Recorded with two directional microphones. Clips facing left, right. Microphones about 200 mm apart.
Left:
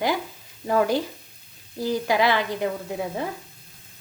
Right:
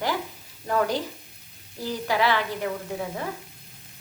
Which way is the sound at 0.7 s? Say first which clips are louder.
Left 3 dB; 10° left (ahead or behind).